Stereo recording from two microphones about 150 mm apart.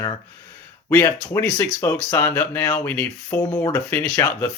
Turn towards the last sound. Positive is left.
turn(degrees=10)  # may be behind; listen again after turning